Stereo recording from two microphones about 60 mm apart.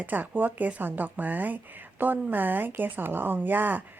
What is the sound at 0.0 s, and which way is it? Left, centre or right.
A woman's voice, right.